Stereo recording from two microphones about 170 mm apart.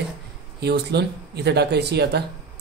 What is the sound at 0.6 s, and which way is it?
Speech, 75° right (ahead or behind).